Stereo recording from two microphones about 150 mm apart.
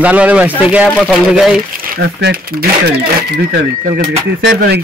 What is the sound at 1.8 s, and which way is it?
Speech, 80° right.